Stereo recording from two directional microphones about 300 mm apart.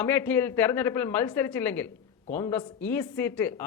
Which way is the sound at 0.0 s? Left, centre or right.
Centre.